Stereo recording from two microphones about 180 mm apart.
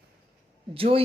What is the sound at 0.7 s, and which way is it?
Speech, 30° right (ahead or behind).